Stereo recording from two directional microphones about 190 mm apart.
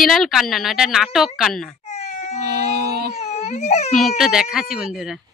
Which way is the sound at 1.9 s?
35° left (ahead or behind).